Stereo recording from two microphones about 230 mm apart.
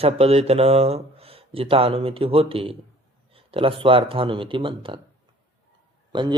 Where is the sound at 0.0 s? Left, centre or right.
Right.